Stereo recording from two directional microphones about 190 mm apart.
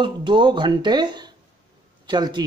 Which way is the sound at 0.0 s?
25° right (ahead or behind).